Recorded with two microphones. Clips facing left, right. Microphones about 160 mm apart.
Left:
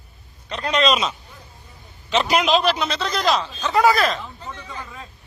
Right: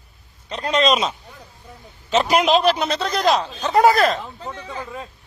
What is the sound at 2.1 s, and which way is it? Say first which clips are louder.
A man's voice: right 2 dB; 45° right (ahead or behind).